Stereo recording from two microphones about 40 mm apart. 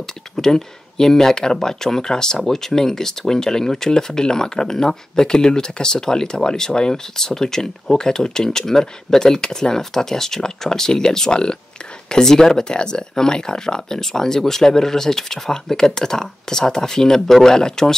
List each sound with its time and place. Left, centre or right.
0.0 s speech: centre